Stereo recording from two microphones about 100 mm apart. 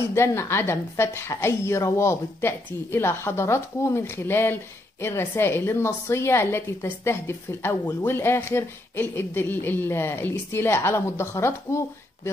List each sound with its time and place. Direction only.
0.0 s a woman's voice: 25° left (ahead or behind)